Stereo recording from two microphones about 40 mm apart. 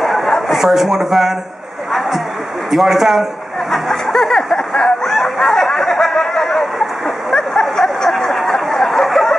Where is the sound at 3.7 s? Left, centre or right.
Centre.